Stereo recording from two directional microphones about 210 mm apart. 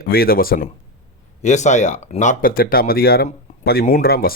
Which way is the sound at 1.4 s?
35° left (ahead or behind).